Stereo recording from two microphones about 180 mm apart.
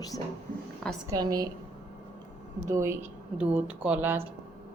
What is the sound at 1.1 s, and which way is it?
Speech, 20° right (ahead or behind).